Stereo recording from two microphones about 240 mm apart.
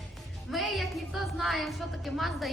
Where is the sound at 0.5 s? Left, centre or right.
Centre.